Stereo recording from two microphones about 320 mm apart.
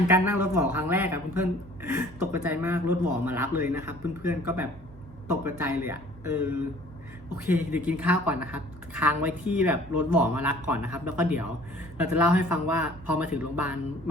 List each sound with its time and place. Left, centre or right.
0.1 s a woman's voice: centre